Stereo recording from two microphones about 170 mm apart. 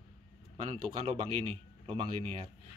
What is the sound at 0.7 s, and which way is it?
Speech, 35° right (ahead or behind).